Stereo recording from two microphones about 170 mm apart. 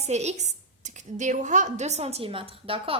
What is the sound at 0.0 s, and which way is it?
A woman's voice, 40° right (ahead or behind).